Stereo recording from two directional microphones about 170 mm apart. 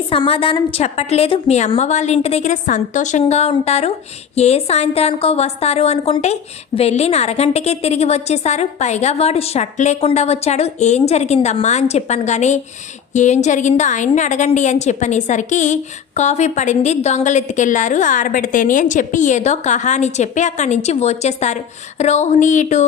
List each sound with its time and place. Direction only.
0.1 s a woman's voice: 30° left (ahead or behind)